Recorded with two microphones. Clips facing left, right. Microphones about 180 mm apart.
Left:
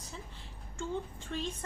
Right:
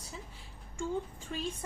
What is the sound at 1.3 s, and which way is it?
Speech, 10° right (ahead or behind).